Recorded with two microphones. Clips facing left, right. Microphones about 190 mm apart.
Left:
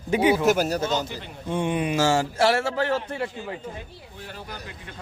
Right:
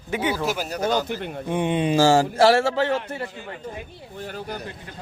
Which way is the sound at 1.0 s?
55° right (ahead or behind).